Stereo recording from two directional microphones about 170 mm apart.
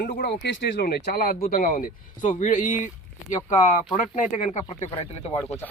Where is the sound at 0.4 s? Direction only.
90° left.